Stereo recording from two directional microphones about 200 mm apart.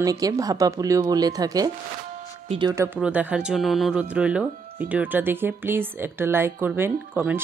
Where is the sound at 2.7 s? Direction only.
10° right (ahead or behind).